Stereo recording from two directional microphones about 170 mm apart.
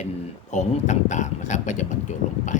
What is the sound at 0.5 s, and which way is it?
Speech, 45° left (ahead or behind).